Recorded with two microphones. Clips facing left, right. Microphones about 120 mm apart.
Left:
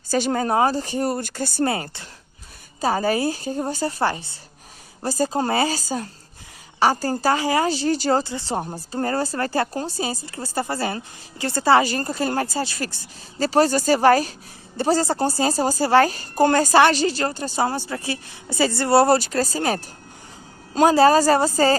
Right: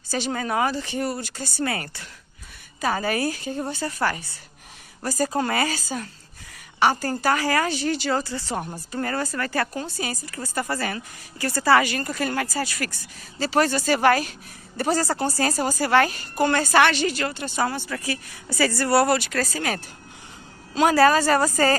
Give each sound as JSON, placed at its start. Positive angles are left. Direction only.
{"t": 0.1, "sound": "speech", "side_deg": 45}
{"t": 1.6, "sound": "speech", "side_deg": 25}
{"t": 2.8, "sound": "a woman's voice", "side_deg": 35}
{"t": 8.2, "sound": "a woman's voice", "side_deg": 25}
{"t": 20.9, "sound": "speech", "side_deg": 25}